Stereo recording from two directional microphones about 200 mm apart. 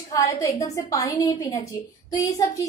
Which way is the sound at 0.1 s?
15° left (ahead or behind).